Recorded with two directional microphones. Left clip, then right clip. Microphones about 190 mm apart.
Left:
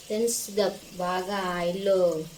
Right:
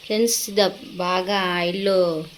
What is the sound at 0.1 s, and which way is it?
Speech, 35° right (ahead or behind).